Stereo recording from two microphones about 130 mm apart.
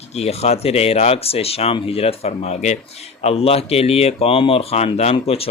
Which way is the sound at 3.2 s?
50° left (ahead or behind).